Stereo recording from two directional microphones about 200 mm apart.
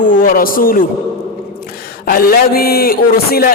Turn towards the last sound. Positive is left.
turn(degrees=50)  # may be behind; listen again after turning